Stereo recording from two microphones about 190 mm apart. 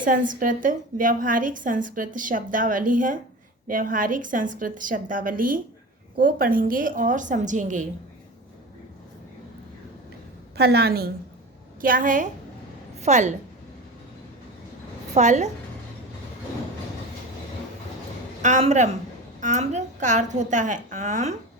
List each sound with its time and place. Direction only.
0.0 s a woman's voice: 45° right (ahead or behind)
10.6 s a woman's voice: 55° right (ahead or behind); by 13.3 s 40° right (ahead or behind)
15.1 s a woman's voice: 40° right (ahead or behind)
18.4 s a woman's voice: 40° right (ahead or behind)